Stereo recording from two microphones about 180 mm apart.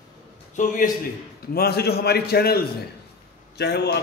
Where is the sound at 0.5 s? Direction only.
50° left (ahead or behind).